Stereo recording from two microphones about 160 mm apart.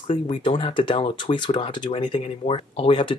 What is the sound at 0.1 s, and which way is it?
Speech, 30° left (ahead or behind).